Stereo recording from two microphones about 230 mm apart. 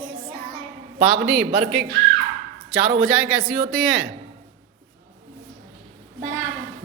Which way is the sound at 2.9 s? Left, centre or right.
Centre.